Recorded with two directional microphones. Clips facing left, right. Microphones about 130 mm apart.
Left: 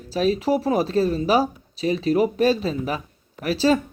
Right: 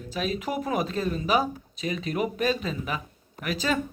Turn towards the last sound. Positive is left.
turn(degrees=35)  # may be behind; listen again after turning